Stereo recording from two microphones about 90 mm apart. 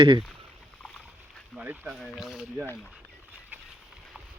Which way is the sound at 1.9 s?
Centre (ahead or behind).